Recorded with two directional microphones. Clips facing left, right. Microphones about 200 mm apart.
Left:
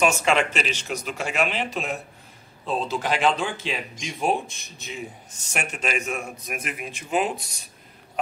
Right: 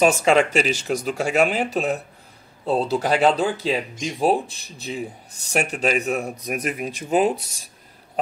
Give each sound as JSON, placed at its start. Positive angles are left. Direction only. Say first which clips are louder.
{"t": 0.0, "sound": "speech", "louder": "right 5 dB", "side_deg": -35}